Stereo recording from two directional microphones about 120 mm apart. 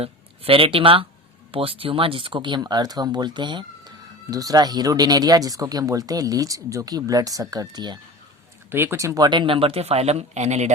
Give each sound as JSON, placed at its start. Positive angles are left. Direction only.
{"t": 0.0, "sound": "speech", "side_deg": -50}
{"t": 8.7, "sound": "speech", "side_deg": -20}